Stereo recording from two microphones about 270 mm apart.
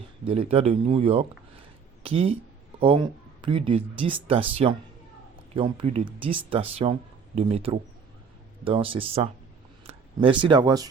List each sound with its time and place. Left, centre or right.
0.3 s speech: right